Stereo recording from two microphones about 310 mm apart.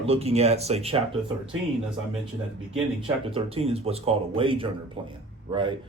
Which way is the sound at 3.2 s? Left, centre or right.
Centre.